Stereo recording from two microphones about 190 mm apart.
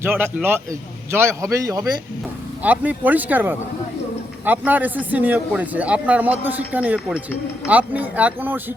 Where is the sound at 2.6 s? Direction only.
10° right (ahead or behind).